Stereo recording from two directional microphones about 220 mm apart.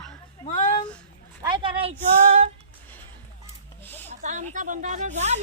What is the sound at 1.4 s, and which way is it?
Speech, 20° right (ahead or behind).